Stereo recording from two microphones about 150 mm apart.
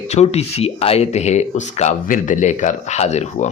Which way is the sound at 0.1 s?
45° left (ahead or behind).